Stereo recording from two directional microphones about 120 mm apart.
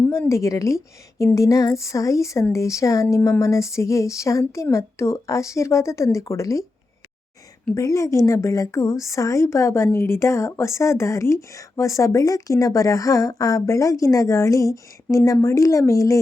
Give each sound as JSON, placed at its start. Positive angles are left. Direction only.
{"t": 0.0, "sound": "a woman's voice", "side_deg": 20}
{"t": 7.8, "sound": "a woman's voice", "side_deg": 25}